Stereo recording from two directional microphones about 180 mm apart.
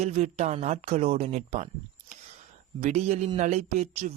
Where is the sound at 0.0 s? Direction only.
40° right (ahead or behind).